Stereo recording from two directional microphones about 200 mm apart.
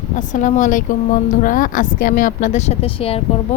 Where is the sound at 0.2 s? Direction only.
40° left (ahead or behind).